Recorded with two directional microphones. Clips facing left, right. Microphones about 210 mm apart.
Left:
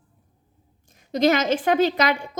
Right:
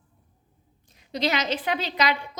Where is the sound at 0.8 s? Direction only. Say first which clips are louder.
Left 8 dB; 45° left (ahead or behind).